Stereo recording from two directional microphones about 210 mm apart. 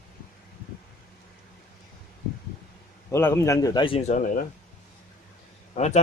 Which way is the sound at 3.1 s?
15° left (ahead or behind).